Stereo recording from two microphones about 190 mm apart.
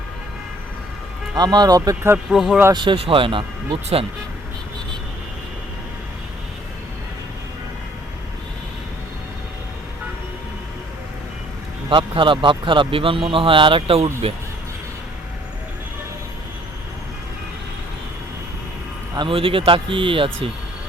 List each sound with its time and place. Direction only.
1.4 s speech: 20° right (ahead or behind)
2.1 s speech: centre (ahead or behind)
2.6 s speech: 25° right (ahead or behind)
11.9 s speech: 25° right (ahead or behind)
19.1 s speech: 25° right (ahead or behind)